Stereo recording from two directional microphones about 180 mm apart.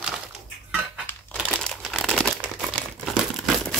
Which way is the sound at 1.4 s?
5° left (ahead or behind).